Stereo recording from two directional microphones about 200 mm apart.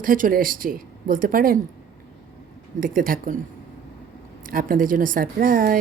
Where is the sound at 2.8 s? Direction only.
45° right (ahead or behind).